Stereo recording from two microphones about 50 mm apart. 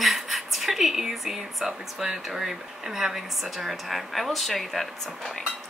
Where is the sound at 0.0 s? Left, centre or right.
Centre.